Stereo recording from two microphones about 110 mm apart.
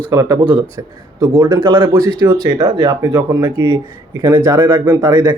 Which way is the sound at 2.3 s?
40° right (ahead or behind).